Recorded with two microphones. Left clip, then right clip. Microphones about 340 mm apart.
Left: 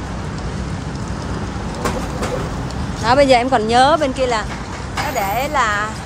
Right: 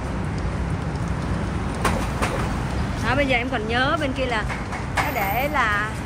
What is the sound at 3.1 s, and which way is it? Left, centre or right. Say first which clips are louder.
Speech: left 10 dB; centre.